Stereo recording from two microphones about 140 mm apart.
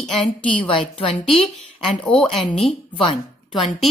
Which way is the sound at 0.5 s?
40° left (ahead or behind).